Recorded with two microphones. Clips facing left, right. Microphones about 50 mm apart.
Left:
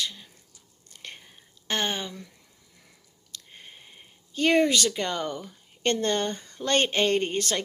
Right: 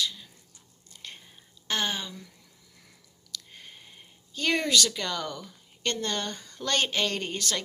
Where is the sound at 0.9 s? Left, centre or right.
Left.